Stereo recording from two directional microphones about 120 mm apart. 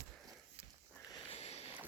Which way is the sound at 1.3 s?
60° left (ahead or behind).